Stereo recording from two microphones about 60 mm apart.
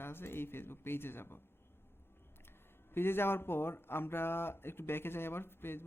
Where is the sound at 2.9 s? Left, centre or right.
Left.